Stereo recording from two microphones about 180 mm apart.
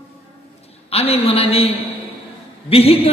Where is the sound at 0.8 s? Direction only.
35° left (ahead or behind).